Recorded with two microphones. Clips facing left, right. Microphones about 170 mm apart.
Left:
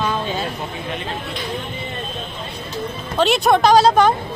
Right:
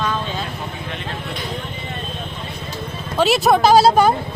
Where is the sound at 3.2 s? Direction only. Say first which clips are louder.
Even; centre (ahead or behind).